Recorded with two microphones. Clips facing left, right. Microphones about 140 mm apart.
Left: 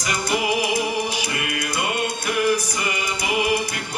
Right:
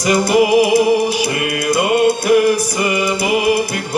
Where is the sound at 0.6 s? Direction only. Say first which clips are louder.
Right 11 dB; 35° right (ahead or behind).